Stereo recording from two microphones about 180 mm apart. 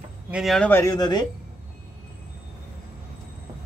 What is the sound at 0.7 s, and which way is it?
Speech, 20° left (ahead or behind).